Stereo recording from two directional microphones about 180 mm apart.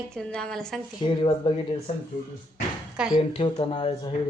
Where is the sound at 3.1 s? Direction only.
25° left (ahead or behind).